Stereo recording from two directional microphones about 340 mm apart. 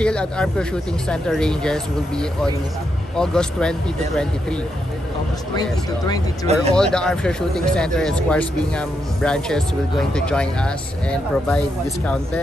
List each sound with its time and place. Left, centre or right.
0.0 s speech: centre
5.6 s speech: centre
6.4 s speech: centre
6.7 s speech: centre